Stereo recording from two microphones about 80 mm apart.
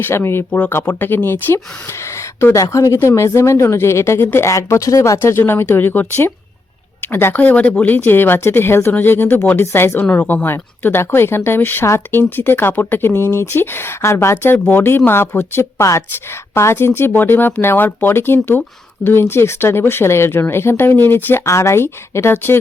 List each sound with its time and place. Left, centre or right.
0.0 s speech: left
21.4 s speech: left